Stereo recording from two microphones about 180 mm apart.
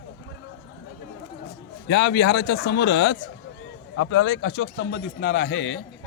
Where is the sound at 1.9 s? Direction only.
75° left (ahead or behind).